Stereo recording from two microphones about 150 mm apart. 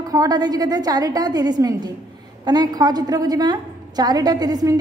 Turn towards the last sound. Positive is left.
turn(degrees=-25)  # may be behind; listen again after turning